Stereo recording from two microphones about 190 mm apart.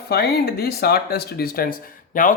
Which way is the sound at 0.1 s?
55° left (ahead or behind).